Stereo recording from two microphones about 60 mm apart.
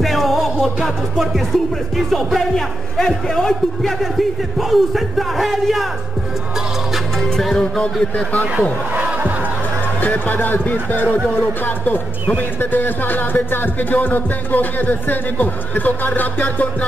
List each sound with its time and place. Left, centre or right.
0.0 s music: centre
1.1 s speech: centre
7.3 s speech: centre
8.9 s crowd: right
10.0 s speech: left